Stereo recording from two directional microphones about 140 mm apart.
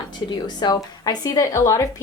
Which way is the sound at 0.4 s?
30° left (ahead or behind).